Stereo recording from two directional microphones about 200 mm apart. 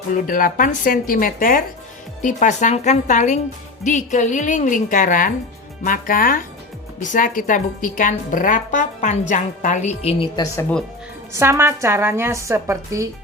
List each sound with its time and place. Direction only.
0.1 s a woman's voice: 45° left (ahead or behind); by 10.8 s 10° left (ahead or behind)
11.3 s a woman's voice: 15° right (ahead or behind)